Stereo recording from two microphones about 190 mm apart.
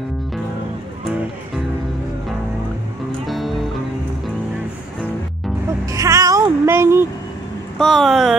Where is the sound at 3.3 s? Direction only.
Centre (ahead or behind).